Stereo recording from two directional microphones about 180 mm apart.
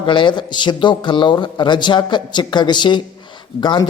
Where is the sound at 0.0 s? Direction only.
25° left (ahead or behind).